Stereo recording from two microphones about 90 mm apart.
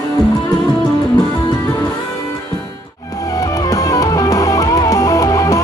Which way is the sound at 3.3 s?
40° left (ahead or behind).